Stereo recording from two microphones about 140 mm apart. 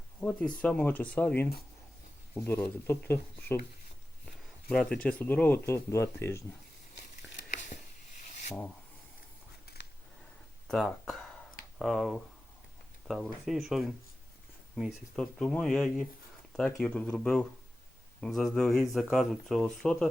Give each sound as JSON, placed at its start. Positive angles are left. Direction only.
{"t": 0.2, "sound": "speech", "side_deg": 10}
{"t": 4.3, "sound": "speech", "side_deg": 5}
{"t": 10.7, "sound": "speech", "side_deg": 5}